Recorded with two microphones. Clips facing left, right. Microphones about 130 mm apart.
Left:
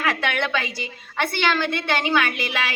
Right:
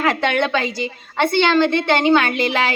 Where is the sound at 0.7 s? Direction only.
20° right (ahead or behind).